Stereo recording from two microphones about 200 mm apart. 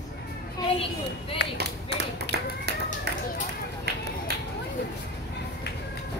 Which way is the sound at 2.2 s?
55° right (ahead or behind).